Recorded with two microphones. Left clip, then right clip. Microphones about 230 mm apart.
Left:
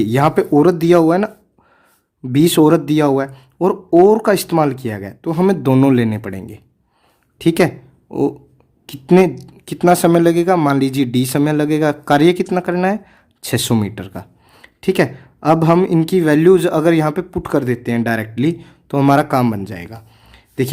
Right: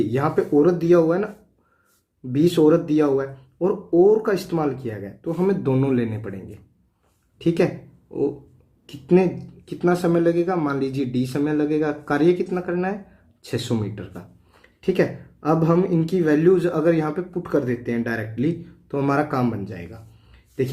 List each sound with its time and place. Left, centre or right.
0.0 s speech: left
2.3 s speech: left
8.9 s speech: left